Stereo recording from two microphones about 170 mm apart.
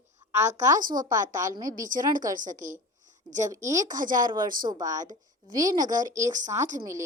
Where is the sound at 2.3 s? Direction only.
50° right (ahead or behind).